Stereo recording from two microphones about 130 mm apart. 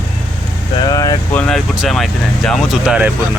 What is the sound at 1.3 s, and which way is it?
Speech, 10° left (ahead or behind).